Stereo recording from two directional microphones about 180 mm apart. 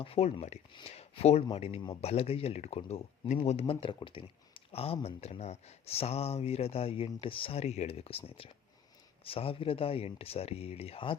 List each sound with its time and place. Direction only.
0.0 s speech: 35° left (ahead or behind)